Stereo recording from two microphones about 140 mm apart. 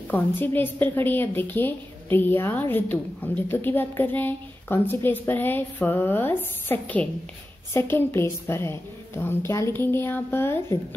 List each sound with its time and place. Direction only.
0.1 s a woman's voice: 15° left (ahead or behind)